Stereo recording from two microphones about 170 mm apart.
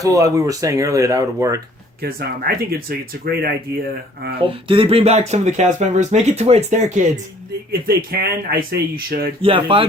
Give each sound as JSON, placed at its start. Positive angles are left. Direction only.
{"t": 0.0, "sound": "speech", "side_deg": -20}
{"t": 2.0, "sound": "speech", "side_deg": -60}
{"t": 4.4, "sound": "speech", "side_deg": -30}
{"t": 7.7, "sound": "speech", "side_deg": -65}
{"t": 9.4, "sound": "speech", "side_deg": -30}